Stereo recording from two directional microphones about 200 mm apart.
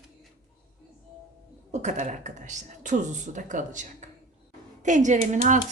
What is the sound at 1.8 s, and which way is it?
Speech, 35° right (ahead or behind).